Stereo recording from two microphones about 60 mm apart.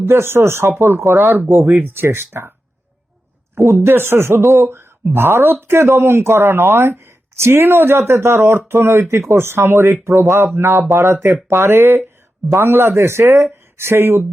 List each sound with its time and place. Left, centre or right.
0.0 s a man's voice: right
3.5 s a man's voice: right